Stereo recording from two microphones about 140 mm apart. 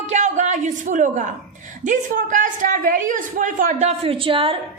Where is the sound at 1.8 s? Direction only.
65° right (ahead or behind).